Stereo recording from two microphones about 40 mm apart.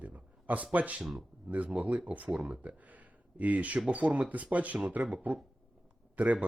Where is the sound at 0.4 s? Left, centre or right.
Right.